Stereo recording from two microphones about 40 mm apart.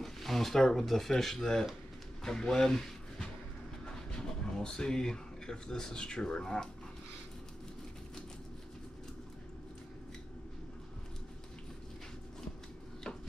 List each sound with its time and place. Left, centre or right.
0.0 s speech: centre